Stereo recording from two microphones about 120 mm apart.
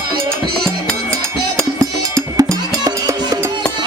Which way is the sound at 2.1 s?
30° right (ahead or behind).